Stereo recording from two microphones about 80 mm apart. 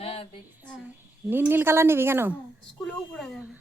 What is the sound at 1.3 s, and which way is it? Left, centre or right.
Speech, right.